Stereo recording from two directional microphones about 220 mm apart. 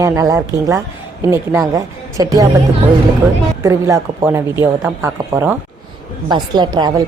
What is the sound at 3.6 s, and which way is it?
A woman's voice, 15° right (ahead or behind).